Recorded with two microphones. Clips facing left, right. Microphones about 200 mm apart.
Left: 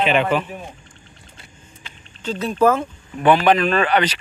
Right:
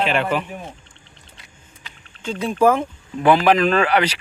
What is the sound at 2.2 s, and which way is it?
Speech, 10° right (ahead or behind).